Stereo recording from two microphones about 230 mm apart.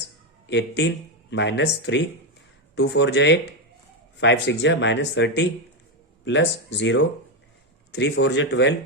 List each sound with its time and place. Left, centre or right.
0.4 s speech: left